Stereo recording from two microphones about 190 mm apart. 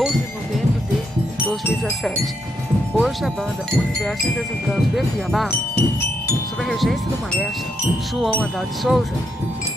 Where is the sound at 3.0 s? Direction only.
Centre (ahead or behind).